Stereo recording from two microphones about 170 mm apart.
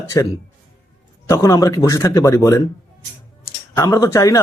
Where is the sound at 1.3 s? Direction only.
20° left (ahead or behind).